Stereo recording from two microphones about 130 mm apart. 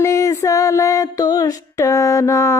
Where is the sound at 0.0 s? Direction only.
25° left (ahead or behind).